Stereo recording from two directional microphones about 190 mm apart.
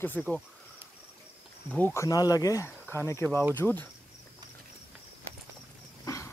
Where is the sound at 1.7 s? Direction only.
10° left (ahead or behind).